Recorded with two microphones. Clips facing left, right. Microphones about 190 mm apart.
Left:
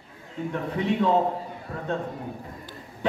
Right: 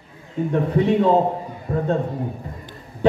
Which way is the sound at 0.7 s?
35° right (ahead or behind).